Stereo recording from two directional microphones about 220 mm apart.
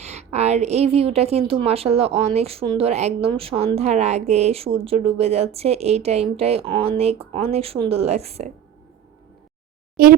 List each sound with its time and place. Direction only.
0.0 s a woman's voice: 30° right (ahead or behind)
10.0 s a child's voice: 45° right (ahead or behind)